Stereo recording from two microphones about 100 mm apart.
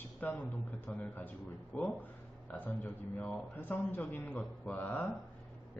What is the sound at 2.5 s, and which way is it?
A man's voice, 15° left (ahead or behind).